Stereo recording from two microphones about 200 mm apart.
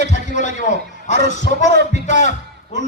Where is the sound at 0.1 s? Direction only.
35° left (ahead or behind).